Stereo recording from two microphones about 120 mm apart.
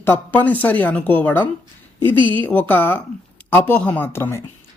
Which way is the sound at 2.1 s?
40° right (ahead or behind).